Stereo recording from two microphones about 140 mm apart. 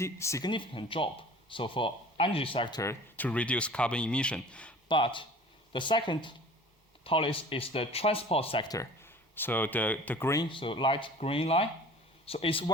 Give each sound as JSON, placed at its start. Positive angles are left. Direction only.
{"t": 0.0, "sound": "speech", "side_deg": 20}
{"t": 0.5, "sound": "speech", "side_deg": 35}
{"t": 2.8, "sound": "speech", "side_deg": 15}
{"t": 4.9, "sound": "speech", "side_deg": 35}
{"t": 8.6, "sound": "speech", "side_deg": 25}
{"t": 9.3, "sound": "speech", "side_deg": 15}
{"t": 10.5, "sound": "speech", "side_deg": 35}